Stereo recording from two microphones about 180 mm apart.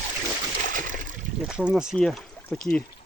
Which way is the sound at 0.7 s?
50° right (ahead or behind).